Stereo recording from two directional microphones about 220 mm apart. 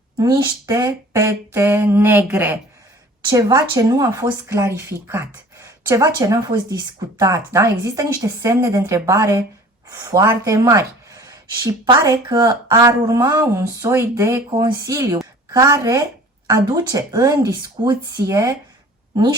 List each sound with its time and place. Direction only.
0.2 s speech: 15° right (ahead or behind)